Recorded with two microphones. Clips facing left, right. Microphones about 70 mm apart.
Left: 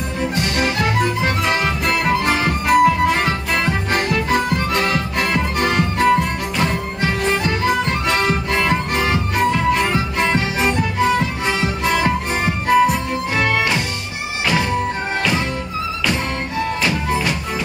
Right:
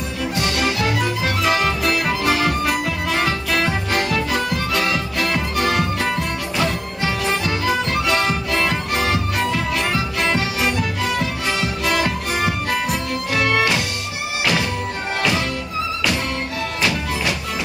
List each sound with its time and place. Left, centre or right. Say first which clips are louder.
0.2 s music: left 1 dB; left
16.8 s music: right 1 dB; left